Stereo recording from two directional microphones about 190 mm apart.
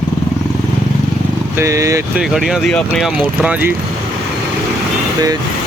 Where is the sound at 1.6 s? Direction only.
15° right (ahead or behind).